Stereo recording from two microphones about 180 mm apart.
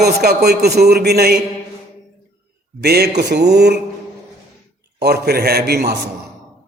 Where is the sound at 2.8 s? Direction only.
65° right (ahead or behind).